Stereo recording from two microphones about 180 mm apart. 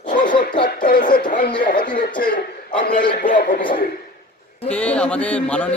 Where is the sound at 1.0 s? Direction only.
50° left (ahead or behind).